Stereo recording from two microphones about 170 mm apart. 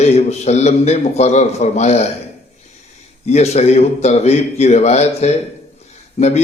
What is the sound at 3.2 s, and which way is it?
A man's voice, 40° left (ahead or behind).